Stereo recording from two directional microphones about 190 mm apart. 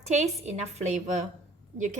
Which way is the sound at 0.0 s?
35° right (ahead or behind).